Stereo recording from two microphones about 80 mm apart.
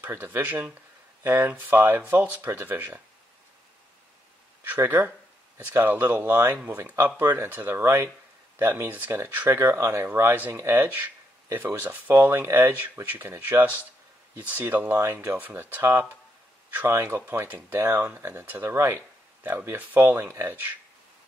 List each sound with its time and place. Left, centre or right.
0.0 s speech: right
4.8 s speech: right
9.8 s speech: right
10.3 s speech: right
18.7 s speech: right